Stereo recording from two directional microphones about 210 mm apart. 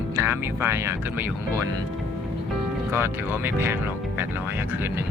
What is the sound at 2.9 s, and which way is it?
Speech, 10° right (ahead or behind).